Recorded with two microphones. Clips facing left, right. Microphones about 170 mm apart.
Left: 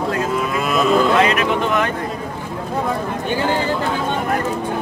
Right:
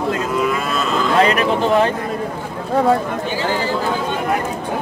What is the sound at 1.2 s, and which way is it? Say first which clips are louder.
Speech: right 1 dB; 35° right (ahead or behind).